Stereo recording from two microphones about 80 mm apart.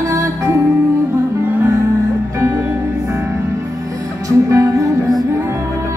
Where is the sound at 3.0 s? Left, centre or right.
Right.